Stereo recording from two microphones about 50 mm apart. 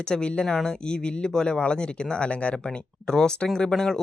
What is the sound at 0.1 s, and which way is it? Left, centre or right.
Speech, centre.